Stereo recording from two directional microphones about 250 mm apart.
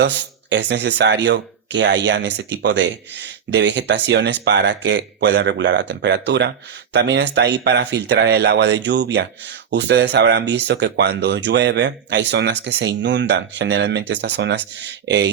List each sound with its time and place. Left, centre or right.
0.5 s speech: right